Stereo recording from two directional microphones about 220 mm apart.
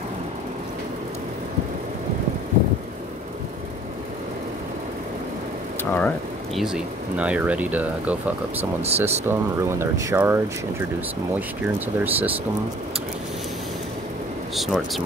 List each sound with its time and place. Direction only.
5.9 s speech: 5° left (ahead or behind)
8.5 s speech: 30° right (ahead or behind)
9.3 s speech: 10° right (ahead or behind)
14.5 s speech: centre (ahead or behind)